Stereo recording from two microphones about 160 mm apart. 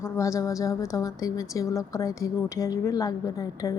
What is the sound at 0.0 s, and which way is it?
A woman's voice, 20° left (ahead or behind).